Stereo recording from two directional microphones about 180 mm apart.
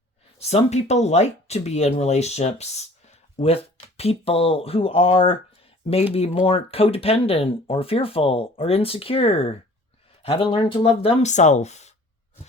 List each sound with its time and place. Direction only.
0.3 s speech: 35° left (ahead or behind)
6.4 s speech: 35° left (ahead or behind)